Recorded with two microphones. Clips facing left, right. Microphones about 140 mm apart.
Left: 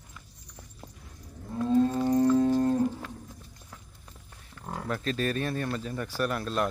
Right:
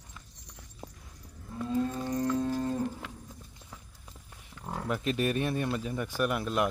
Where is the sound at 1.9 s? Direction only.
40° left (ahead or behind).